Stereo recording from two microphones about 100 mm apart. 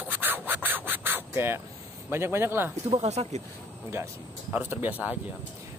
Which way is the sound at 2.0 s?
25° right (ahead or behind).